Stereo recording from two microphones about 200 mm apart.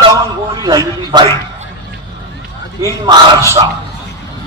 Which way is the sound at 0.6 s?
20° right (ahead or behind).